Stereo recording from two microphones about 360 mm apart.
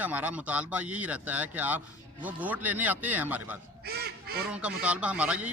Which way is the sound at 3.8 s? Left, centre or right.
Right.